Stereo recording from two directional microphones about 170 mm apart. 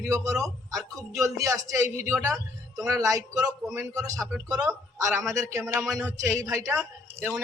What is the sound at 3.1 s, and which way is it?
A man's voice, 15° right (ahead or behind).